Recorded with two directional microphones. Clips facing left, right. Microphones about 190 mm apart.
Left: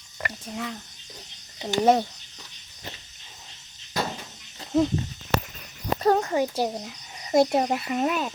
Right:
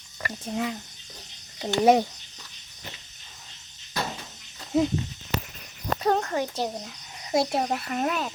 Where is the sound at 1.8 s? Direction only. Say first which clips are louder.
Right 1 dB; 10° right (ahead or behind).